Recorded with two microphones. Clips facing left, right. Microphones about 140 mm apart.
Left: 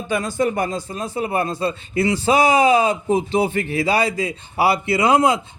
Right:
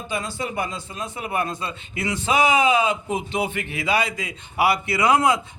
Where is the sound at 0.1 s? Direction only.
45° left (ahead or behind).